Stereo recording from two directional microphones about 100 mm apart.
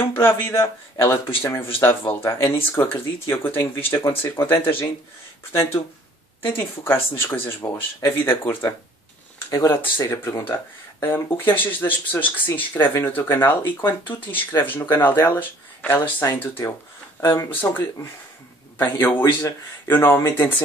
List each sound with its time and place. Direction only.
0.0 s speech: 25° left (ahead or behind)